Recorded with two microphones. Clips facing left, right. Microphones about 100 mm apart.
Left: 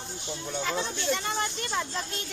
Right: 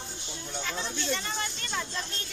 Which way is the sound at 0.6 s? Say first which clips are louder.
Left 3 dB; 20° left (ahead or behind).